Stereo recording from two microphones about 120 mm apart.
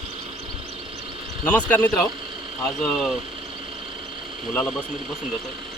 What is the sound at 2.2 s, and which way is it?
Vehicle, 45° right (ahead or behind).